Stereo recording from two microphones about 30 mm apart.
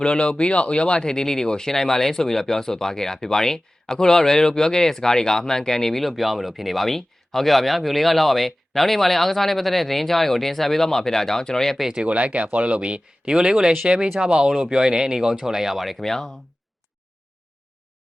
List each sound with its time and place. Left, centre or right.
0.0 s speech: left
1.1 s speech: centre
6.0 s speech: centre
12.0 s speech: right
13.3 s speech: right
13.8 s speech: right
14.2 s speech: right; by 16.0 s centre
16.0 s speech: centre